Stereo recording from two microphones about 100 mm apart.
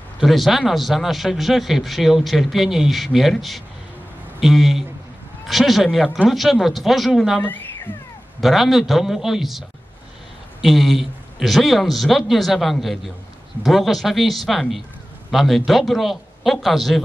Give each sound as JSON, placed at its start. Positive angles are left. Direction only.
{"t": 0.2, "sound": "a man's voice", "side_deg": 0}